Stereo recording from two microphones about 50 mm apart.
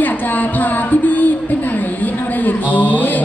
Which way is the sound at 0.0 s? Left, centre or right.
Left.